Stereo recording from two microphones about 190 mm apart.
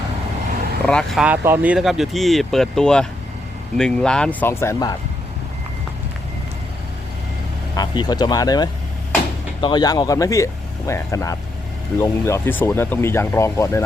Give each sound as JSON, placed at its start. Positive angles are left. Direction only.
{"t": 0.9, "sound": "speech", "side_deg": 5}
{"t": 1.2, "sound": "speech", "side_deg": -10}
{"t": 7.8, "sound": "speech", "side_deg": 20}